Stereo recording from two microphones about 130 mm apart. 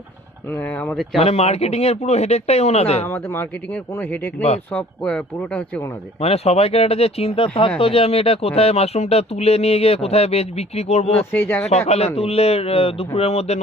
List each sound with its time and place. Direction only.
0.5 s speech: 10° left (ahead or behind)
1.2 s speech: 50° left (ahead or behind)
3.1 s speech: 20° left (ahead or behind)
6.1 s speech: 55° left (ahead or behind)
11.3 s speech: 15° left (ahead or behind)
11.9 s speech: 55° left (ahead or behind)